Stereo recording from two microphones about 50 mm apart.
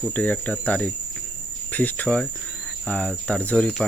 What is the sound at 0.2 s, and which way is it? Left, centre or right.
Speech, left.